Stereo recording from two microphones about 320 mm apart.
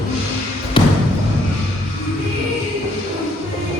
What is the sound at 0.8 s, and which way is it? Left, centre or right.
Basketball bounce, centre.